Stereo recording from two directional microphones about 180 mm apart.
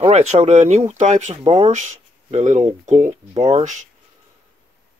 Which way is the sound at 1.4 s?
30° right (ahead or behind).